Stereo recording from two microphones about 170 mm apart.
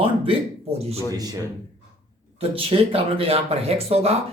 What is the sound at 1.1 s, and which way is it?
Speech, 20° right (ahead or behind).